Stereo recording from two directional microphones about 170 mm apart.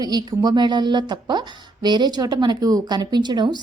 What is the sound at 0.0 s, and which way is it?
A woman's voice, 25° right (ahead or behind).